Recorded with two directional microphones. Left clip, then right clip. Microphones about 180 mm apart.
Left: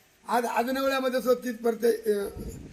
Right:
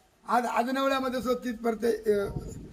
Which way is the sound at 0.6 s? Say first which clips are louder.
Left 1 dB; 25° right (ahead or behind).